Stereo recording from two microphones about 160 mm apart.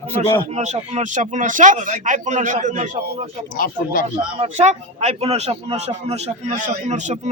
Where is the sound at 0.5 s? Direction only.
45° right (ahead or behind).